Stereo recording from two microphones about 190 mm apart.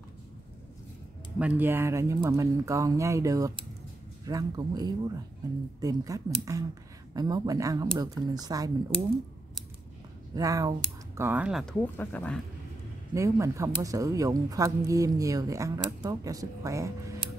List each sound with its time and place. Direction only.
1.4 s speech: 10° right (ahead or behind)
10.3 s speech: 20° right (ahead or behind)
11.8 s speech: 10° left (ahead or behind)
13.1 s speech: 15° right (ahead or behind)